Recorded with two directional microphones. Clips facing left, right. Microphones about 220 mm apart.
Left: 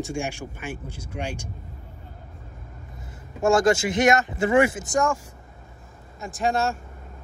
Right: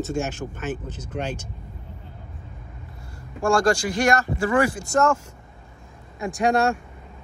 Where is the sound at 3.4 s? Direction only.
20° left (ahead or behind).